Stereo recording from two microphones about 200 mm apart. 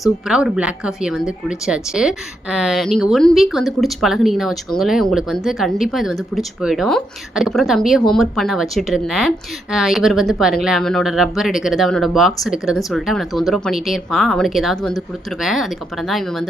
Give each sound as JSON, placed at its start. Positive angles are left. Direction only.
{"t": 0.3, "sound": "a woman's voice", "side_deg": -5}